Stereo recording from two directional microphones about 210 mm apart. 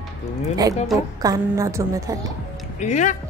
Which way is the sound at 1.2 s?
15° right (ahead or behind).